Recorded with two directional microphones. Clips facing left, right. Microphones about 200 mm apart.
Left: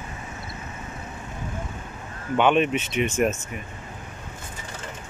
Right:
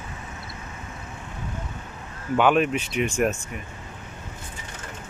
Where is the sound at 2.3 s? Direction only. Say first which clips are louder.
Even; 5° right (ahead or behind).